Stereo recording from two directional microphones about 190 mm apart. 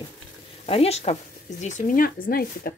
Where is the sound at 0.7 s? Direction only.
30° left (ahead or behind).